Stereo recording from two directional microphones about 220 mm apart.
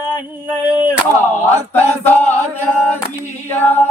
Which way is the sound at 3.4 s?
10° left (ahead or behind).